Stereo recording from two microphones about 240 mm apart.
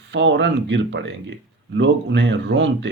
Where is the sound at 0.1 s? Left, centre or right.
Right.